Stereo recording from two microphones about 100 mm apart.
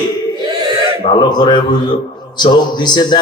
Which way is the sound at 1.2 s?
50° left (ahead or behind).